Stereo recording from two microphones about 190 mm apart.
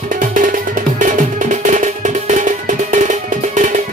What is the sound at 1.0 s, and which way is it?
Music, 40° right (ahead or behind).